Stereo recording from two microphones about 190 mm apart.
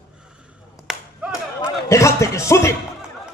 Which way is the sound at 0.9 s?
Centre (ahead or behind).